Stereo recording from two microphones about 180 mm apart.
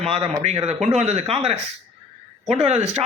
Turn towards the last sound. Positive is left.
turn(degrees=-35)  # may be behind; listen again after turning